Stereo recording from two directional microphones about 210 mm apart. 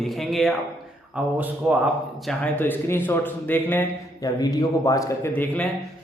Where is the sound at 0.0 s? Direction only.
Centre (ahead or behind).